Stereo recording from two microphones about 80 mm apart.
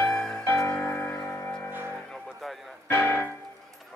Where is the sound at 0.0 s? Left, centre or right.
Centre.